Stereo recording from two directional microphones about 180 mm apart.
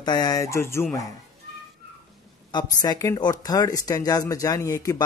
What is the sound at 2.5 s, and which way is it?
Speech, 20° left (ahead or behind).